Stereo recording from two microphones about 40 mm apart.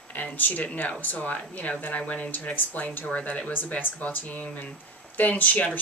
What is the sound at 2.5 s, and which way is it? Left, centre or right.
A woman's voice, left.